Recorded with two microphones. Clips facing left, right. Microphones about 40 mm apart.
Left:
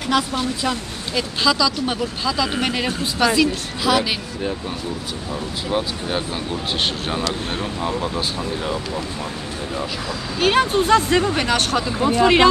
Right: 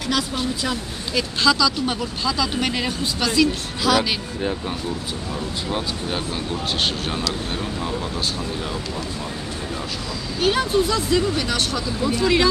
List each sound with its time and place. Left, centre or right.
1.1 s a woman's voice: centre
5.7 s a woman's voice: centre
10.4 s speech: left